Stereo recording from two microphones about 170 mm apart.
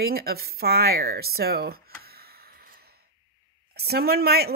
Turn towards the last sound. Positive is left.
turn(degrees=-65)  # may be behind; listen again after turning